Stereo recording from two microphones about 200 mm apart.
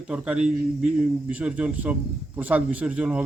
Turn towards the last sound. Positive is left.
turn(degrees=-5)  # may be behind; listen again after turning